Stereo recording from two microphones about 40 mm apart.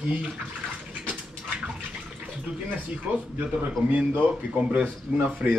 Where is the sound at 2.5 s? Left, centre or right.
Right.